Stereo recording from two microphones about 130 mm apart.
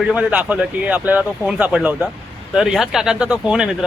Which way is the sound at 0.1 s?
10° right (ahead or behind).